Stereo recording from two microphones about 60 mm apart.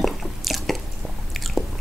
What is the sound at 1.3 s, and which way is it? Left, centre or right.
Squish, centre.